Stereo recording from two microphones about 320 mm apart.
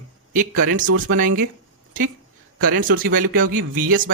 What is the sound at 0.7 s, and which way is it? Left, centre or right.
Speech, right.